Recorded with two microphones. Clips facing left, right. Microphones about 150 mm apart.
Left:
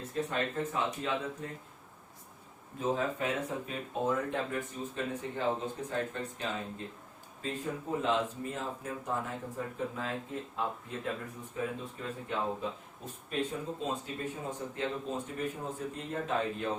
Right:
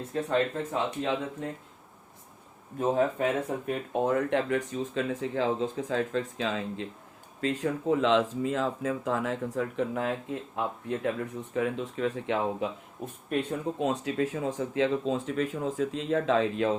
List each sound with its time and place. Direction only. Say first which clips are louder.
0.3 s speech: right 6 dB; 90° right
2.7 s speech: right 6 dB; 55° right (ahead or behind); by 11.1 s 75° right (ahead or behind)
11.5 s speech: right 7 dB; 85° right
13.3 s speech: right 5 dB; 70° right (ahead or behind); by 16.7 s 90° right